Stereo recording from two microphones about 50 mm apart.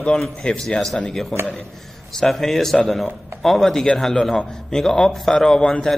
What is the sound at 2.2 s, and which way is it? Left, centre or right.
A man's voice, centre.